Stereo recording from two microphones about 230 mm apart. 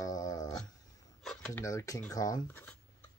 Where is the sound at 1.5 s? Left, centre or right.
Centre.